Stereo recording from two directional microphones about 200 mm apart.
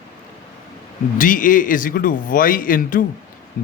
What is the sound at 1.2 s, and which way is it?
Speech, 40° left (ahead or behind).